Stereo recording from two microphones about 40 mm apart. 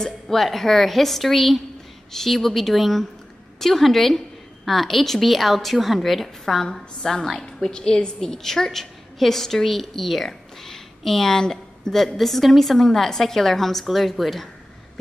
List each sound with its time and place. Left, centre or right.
0.0 s a woman's voice: centre; by 8.1 s left
8.2 s a woman's voice: centre
11.9 s a woman's voice: centre